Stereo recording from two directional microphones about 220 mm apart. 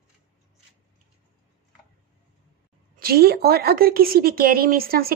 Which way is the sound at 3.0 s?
45° right (ahead or behind).